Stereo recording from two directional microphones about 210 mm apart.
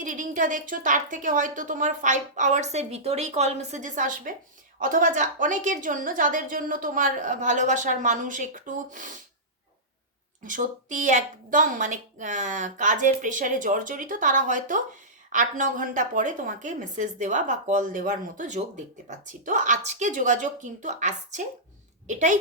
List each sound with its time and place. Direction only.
0.0 s a woman's voice: 40° right (ahead or behind)
10.4 s a woman's voice: 40° right (ahead or behind)